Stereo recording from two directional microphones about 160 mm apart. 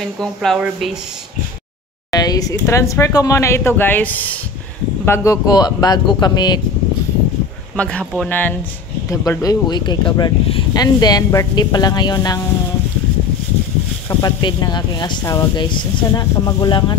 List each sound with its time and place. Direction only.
0.2 s a woman's voice: 5° left (ahead or behind)
2.0 s speech: 25° left (ahead or behind)
7.7 s speech: 5° left (ahead or behind); by 12.4 s 25° left (ahead or behind)
14.0 s speech: 25° left (ahead or behind)